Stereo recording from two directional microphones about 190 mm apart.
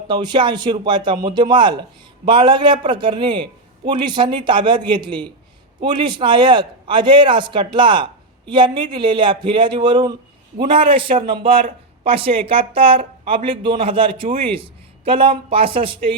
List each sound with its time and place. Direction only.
0.1 s a man's voice: 25° right (ahead or behind)